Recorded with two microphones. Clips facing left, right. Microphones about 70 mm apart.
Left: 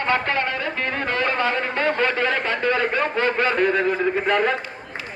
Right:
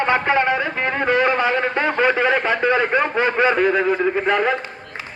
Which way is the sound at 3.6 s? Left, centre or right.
Centre.